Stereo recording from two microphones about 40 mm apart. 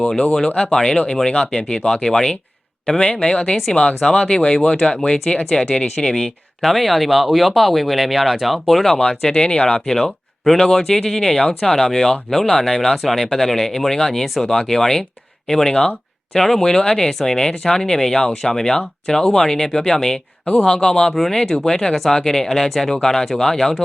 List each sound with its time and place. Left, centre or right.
0.4 s speech: left
0.7 s a man's voice: centre
4.8 s speech: centre
5.0 s speech: left; by 9.0 s centre
9.3 s speech: left